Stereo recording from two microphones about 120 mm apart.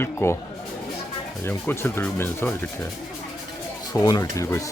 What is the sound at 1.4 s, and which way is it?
Speech, 20° left (ahead or behind).